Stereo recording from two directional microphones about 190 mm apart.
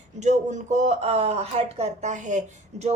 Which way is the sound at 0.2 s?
40° right (ahead or behind).